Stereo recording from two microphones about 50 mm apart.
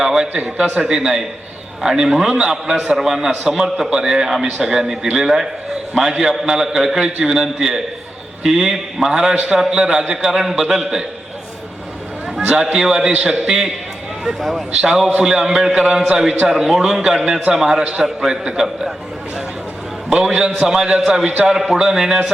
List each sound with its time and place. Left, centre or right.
0.0 s a man's voice: centre
0.3 s a man's voice: right
0.9 s a man's voice: centre
12.5 s a man's voice: centre
14.3 s a man's voice: centre
14.8 s a man's voice: centre
20.1 s a man's voice: centre